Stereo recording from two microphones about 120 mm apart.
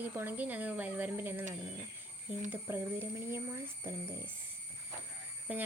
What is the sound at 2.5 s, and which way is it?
A woman's voice, 15° right (ahead or behind).